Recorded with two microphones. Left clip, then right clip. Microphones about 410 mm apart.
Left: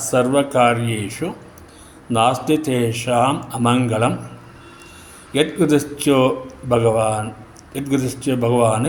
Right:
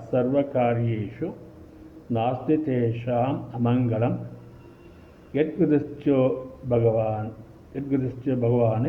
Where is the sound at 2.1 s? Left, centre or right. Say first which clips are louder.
Left 9 dB; centre.